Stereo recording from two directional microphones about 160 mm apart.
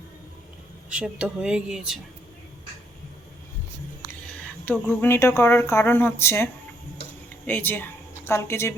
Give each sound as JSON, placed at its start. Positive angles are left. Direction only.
{"t": 0.9, "sound": "speech", "side_deg": -5}
{"t": 4.6, "sound": "speech", "side_deg": 10}